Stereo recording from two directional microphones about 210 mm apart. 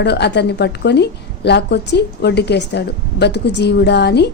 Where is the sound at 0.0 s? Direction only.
55° left (ahead or behind).